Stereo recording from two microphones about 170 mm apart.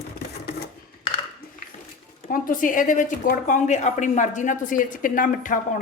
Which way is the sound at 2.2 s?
55° left (ahead or behind).